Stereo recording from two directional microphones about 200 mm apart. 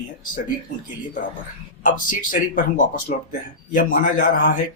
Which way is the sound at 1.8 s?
40° left (ahead or behind).